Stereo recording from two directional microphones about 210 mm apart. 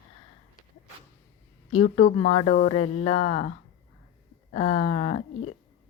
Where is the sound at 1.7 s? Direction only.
30° left (ahead or behind).